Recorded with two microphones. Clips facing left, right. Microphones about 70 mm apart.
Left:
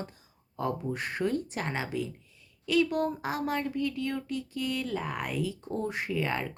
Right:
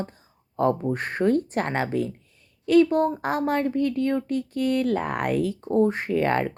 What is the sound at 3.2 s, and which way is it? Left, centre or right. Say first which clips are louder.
Speech: right 7 dB; right.